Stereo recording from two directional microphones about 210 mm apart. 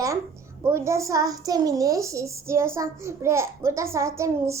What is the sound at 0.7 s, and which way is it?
A child's voice, 15° right (ahead or behind).